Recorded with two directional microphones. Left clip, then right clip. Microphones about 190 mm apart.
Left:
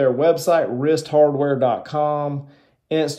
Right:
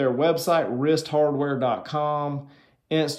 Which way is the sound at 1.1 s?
35° right (ahead or behind).